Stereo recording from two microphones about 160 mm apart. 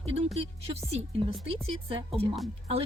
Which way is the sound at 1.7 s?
35° right (ahead or behind).